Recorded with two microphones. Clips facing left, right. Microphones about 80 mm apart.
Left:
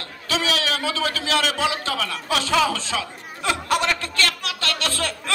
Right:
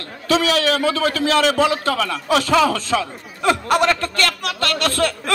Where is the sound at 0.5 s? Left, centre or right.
Right.